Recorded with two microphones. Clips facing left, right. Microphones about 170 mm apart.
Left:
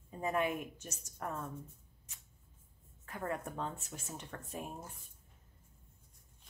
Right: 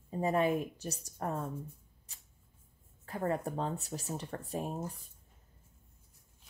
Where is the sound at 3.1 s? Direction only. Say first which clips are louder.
Right 6 dB; 35° right (ahead or behind).